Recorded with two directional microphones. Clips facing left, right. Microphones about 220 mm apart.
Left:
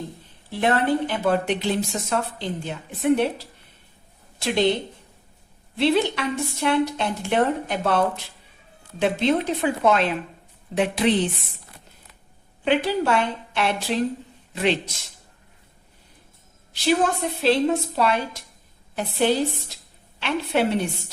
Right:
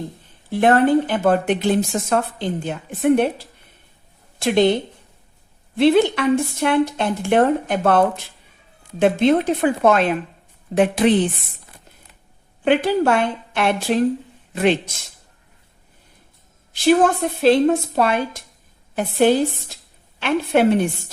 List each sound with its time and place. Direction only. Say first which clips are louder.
0.6 s speech: right 6 dB; 50° right (ahead or behind)
5.7 s speech: right 6 dB; 50° right (ahead or behind)
12.6 s speech: right 5 dB; 50° right (ahead or behind)
16.7 s speech: right 6 dB; 50° right (ahead or behind)